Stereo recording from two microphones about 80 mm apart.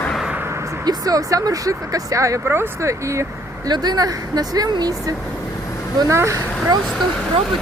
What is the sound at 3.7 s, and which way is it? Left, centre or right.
Speech, right.